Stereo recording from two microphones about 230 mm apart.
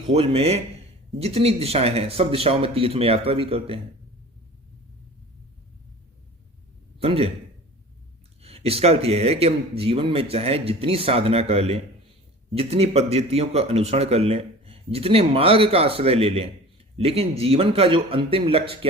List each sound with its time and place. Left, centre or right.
0.1 s speech: right
7.0 s a man's voice: right
8.4 s speech: right